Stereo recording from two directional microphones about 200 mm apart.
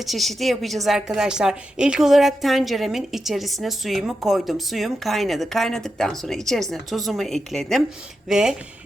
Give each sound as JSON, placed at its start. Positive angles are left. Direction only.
{"t": 0.0, "sound": "a woman's voice", "side_deg": 0}